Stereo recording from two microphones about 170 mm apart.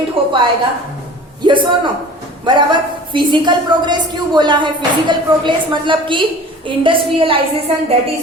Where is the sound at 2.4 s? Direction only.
25° right (ahead or behind).